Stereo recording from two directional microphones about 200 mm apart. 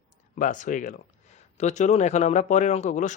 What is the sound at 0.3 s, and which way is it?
Speech, 40° left (ahead or behind).